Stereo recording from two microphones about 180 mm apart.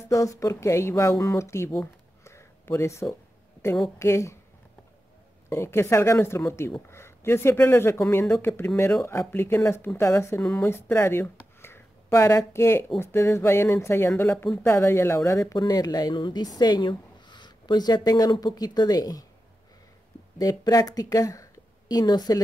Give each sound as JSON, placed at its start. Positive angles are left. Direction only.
{"t": 0.1, "sound": "speech", "side_deg": 15}
{"t": 2.2, "sound": "a sound", "side_deg": 15}
{"t": 4.0, "sound": "speech", "side_deg": 15}
{"t": 5.5, "sound": "a woman's voice", "side_deg": 15}
{"t": 20.3, "sound": "a woman's voice", "side_deg": 20}